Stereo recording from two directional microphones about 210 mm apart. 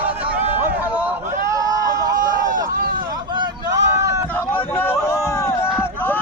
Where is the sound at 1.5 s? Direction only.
15° right (ahead or behind).